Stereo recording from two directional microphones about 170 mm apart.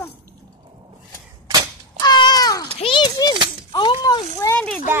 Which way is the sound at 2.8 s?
30° left (ahead or behind).